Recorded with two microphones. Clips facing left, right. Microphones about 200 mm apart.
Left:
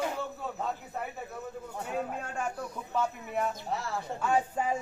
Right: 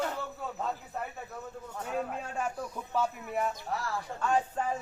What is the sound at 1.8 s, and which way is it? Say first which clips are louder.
Speech: even; 10° left (ahead or behind).